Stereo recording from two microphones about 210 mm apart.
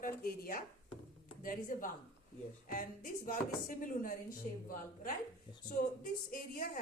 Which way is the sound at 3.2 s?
40° left (ahead or behind).